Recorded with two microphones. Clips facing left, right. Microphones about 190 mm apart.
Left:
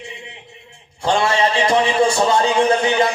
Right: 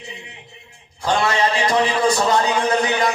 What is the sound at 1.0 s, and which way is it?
A man's voice, 25° left (ahead or behind).